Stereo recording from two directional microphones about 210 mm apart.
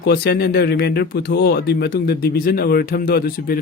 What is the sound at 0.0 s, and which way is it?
Speech, 50° left (ahead or behind).